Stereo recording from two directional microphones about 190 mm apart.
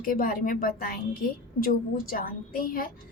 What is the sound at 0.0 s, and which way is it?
A woman's voice, 50° left (ahead or behind).